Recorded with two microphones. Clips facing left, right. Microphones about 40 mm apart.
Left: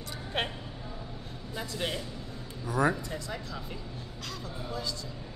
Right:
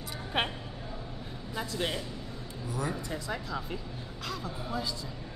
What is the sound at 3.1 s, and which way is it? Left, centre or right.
Speech, centre.